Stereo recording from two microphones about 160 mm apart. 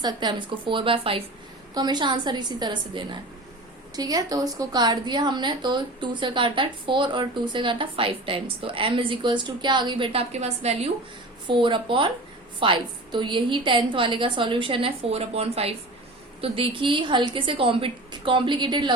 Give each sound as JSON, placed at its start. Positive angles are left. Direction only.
{"t": 0.0, "sound": "a woman's voice", "side_deg": -25}